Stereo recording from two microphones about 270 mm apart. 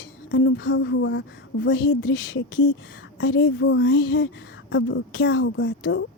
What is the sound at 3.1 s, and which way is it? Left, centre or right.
A woman's voice, left.